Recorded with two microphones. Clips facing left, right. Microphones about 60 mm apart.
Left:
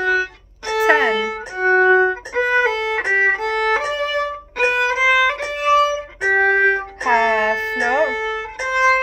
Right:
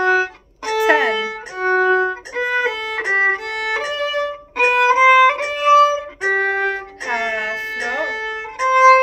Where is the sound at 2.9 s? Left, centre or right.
Left.